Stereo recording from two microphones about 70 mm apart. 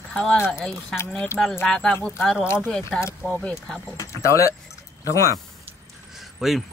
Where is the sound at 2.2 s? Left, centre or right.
Centre.